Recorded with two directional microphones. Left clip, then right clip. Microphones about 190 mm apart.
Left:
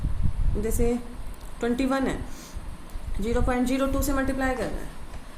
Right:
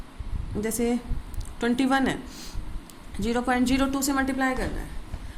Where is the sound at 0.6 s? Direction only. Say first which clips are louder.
Even; 30° right (ahead or behind).